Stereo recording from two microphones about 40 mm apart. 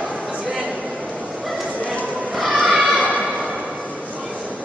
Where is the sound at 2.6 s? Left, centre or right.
Right.